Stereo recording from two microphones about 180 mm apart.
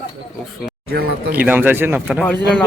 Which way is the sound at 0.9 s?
55° right (ahead or behind).